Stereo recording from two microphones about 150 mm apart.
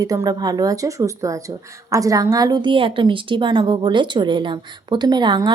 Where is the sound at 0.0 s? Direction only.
25° right (ahead or behind).